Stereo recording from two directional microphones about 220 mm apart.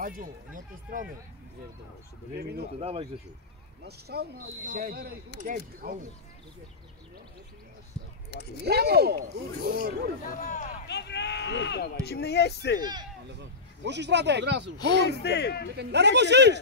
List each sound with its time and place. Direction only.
0.0 s speech: 40° right (ahead or behind)
2.8 s speech: 30° right (ahead or behind)
3.8 s speech: 45° right (ahead or behind)
8.3 s speech: 50° left (ahead or behind)
8.6 s speech: 45° right (ahead or behind)
10.4 s speech: 35° left (ahead or behind)
10.9 s speech: 50° left (ahead or behind)
12.8 s speech: 20° right (ahead or behind)
13.3 s speech: 50° right (ahead or behind)
15.0 s speech: 50° left (ahead or behind)
15.7 s speech: 50° right (ahead or behind)